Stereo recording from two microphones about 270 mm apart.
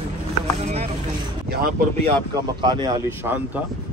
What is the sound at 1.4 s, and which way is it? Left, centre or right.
Speech, right.